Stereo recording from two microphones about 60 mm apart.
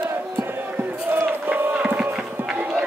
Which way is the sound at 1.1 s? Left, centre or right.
Right.